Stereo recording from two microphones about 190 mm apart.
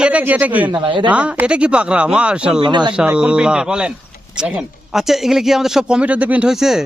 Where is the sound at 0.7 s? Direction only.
25° right (ahead or behind).